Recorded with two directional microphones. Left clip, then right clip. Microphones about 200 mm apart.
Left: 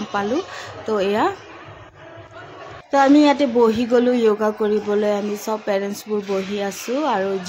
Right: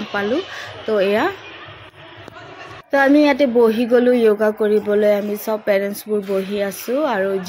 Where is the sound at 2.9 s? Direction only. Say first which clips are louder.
Even; centre (ahead or behind).